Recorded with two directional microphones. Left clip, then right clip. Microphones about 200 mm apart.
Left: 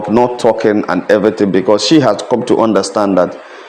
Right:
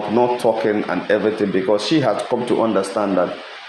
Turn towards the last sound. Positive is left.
turn(degrees=50)  # may be behind; listen again after turning